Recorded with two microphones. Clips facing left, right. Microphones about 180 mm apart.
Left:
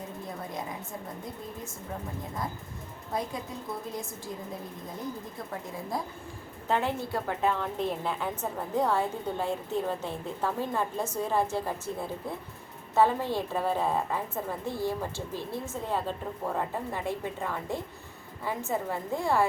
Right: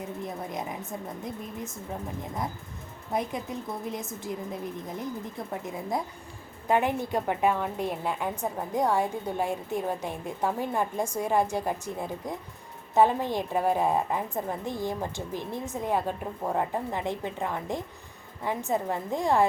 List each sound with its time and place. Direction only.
0.3 s a woman's voice: 20° right (ahead or behind)
3.1 s a woman's voice: 20° right (ahead or behind)
6.7 s a woman's voice: 15° right (ahead or behind)